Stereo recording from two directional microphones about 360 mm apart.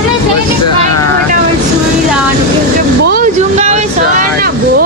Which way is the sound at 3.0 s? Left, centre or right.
Right.